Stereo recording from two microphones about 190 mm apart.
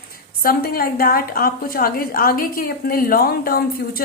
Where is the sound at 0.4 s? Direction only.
50° left (ahead or behind).